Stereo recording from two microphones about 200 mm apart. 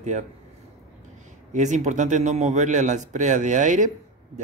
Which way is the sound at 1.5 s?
35° right (ahead or behind).